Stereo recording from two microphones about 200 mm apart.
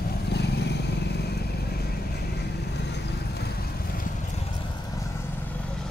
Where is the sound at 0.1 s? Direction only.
55° left (ahead or behind).